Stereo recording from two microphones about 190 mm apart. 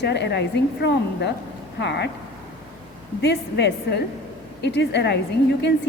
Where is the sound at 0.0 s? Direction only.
60° left (ahead or behind).